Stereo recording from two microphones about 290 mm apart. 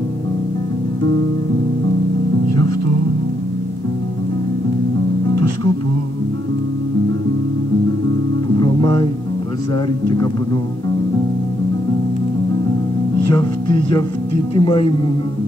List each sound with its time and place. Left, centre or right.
8.8 s music: centre
13.3 s music: centre
14.5 s speech: centre